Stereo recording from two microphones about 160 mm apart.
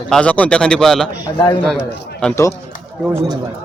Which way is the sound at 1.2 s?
25° left (ahead or behind).